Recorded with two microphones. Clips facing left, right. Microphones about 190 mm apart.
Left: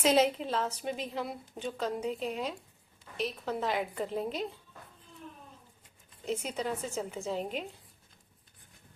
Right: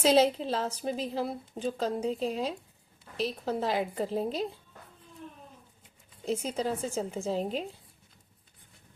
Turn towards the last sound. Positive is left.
turn(degrees=-35)  # may be behind; listen again after turning